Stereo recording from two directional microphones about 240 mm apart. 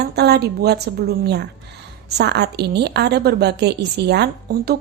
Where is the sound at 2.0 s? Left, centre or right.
Right.